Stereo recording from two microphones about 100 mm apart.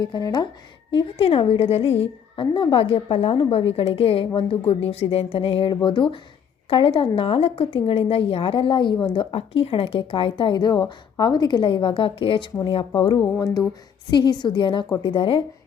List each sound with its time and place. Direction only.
0.0 s a woman's voice: 45° left (ahead or behind)
0.9 s a woman's voice: 65° left (ahead or behind)
2.5 s a woman's voice: 50° left (ahead or behind)
7.2 s a woman's voice: 70° left (ahead or behind); by 9.2 s 50° left (ahead or behind)
9.3 s speech: 75° left (ahead or behind); by 12.5 s 60° left (ahead or behind)
12.9 s a woman's voice: 45° left (ahead or behind)
13.4 s a sound: 40° left (ahead or behind)
14.1 s a woman's voice: 45° left (ahead or behind)